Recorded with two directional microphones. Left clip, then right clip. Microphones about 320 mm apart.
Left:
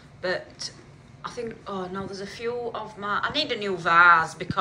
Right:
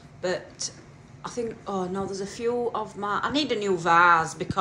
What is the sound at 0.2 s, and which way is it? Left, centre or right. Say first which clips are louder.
Speech: even; centre.